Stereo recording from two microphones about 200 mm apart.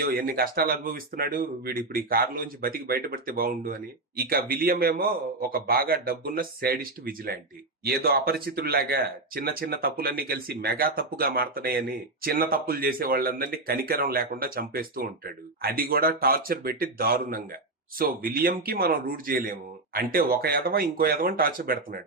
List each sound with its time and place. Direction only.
0.0 s speech: 45° right (ahead or behind)